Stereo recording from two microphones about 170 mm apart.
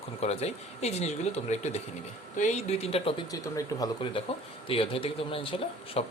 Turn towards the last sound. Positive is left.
turn(degrees=35)  # may be behind; listen again after turning